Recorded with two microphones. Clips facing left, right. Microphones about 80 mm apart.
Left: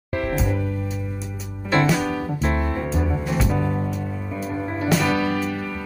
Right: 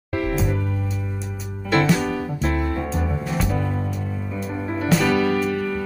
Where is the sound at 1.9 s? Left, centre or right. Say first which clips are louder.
Right 1 dB; centre.